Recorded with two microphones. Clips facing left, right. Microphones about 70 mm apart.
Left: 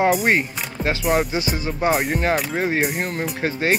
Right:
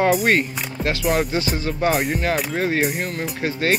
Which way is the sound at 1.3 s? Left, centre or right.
Centre.